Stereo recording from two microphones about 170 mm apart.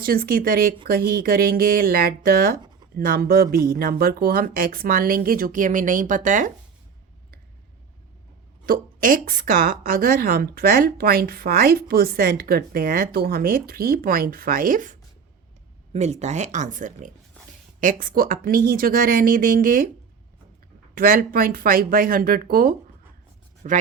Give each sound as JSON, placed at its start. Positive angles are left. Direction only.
{"t": 0.0, "sound": "a woman's voice", "side_deg": -60}
{"t": 8.6, "sound": "a woman's voice", "side_deg": -55}
{"t": 15.9, "sound": "speech", "side_deg": -40}
{"t": 17.4, "sound": "a sound", "side_deg": 10}
{"t": 17.7, "sound": "a woman's voice", "side_deg": -55}
{"t": 20.9, "sound": "a woman's voice", "side_deg": -55}